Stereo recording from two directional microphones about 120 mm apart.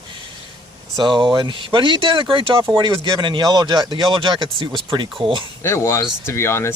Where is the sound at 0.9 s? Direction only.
40° right (ahead or behind).